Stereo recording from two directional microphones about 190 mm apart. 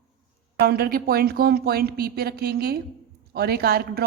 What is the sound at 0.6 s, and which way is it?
A woman's voice, 50° right (ahead or behind).